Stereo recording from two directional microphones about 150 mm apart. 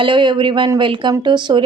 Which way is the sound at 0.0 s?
30° right (ahead or behind).